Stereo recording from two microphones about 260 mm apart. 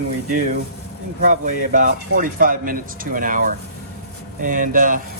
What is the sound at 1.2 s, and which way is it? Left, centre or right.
A man's voice, right.